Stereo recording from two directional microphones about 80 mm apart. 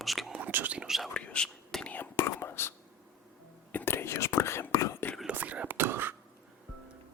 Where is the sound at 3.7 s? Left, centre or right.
Left.